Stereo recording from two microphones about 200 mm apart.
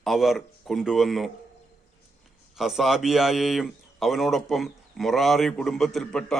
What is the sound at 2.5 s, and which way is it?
A man's voice, centre (ahead or behind).